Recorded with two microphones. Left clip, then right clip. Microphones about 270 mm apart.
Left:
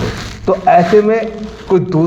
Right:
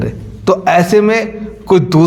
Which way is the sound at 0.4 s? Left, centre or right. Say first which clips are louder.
Left 1 dB; right.